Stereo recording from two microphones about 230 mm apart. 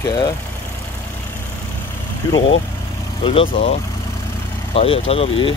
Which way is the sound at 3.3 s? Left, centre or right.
Left.